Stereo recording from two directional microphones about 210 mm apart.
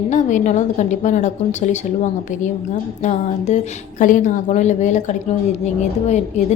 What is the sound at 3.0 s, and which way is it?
A woman's voice, 35° left (ahead or behind).